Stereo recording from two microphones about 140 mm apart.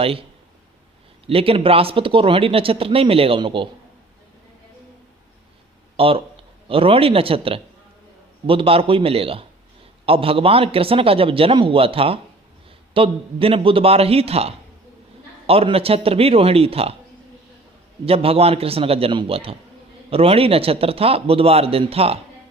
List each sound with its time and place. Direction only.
0.0 s speech: 40° right (ahead or behind)
1.3 s speech: 40° right (ahead or behind)
6.0 s a man's voice: 40° right (ahead or behind)
18.0 s a man's voice: 45° right (ahead or behind)